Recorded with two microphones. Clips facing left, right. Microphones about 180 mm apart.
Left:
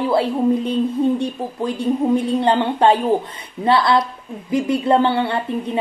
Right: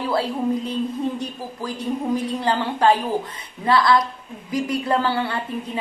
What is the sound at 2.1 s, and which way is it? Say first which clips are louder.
A woman's voice: left 6 dB; 25° left (ahead or behind).